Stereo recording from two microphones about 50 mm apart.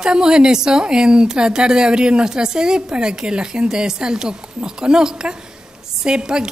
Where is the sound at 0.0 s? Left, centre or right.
Centre.